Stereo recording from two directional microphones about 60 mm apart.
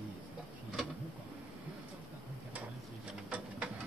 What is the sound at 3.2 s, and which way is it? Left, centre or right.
Printer, right.